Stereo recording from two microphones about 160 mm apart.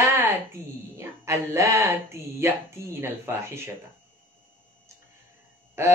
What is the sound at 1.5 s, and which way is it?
A woman's voice, 20° right (ahead or behind).